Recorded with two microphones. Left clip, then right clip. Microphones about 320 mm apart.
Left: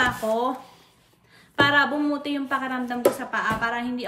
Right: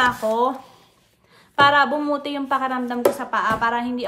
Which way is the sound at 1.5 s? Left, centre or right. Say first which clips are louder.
Right 4 dB; centre.